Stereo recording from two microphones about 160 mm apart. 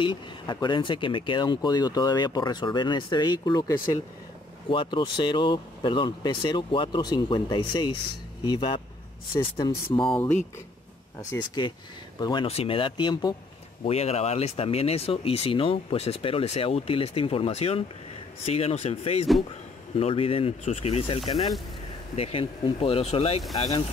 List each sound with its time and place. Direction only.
0.0 s speech: 30° left (ahead or behind)
13.8 s speech: 40° left (ahead or behind)